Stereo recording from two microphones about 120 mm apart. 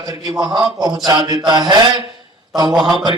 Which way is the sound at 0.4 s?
40° right (ahead or behind).